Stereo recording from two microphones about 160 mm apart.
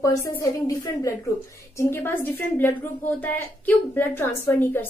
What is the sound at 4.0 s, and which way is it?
Speech, 15° left (ahead or behind).